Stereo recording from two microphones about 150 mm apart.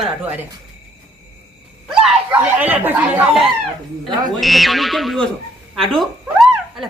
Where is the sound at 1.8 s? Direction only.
5° right (ahead or behind).